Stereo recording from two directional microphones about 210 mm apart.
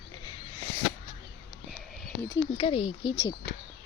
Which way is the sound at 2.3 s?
25° left (ahead or behind).